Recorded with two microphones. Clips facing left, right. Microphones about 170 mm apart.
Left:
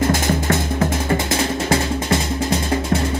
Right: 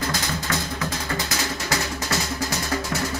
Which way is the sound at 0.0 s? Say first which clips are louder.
Left 9 dB; 25° left (ahead or behind).